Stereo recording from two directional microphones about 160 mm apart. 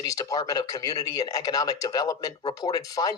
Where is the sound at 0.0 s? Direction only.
20° left (ahead or behind).